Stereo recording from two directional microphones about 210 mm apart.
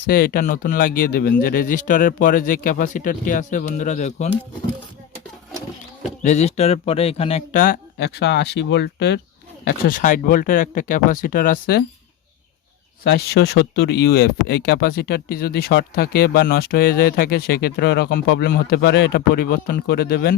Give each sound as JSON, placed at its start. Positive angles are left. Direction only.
{"t": 0.0, "sound": "speech", "side_deg": 45}
{"t": 6.0, "sound": "speech", "side_deg": 30}
{"t": 9.6, "sound": "speech", "side_deg": 40}
{"t": 13.1, "sound": "speech", "side_deg": 50}